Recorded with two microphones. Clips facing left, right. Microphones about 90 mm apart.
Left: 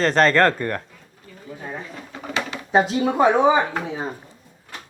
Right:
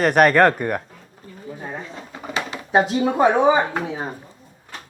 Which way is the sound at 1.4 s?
15° right (ahead or behind).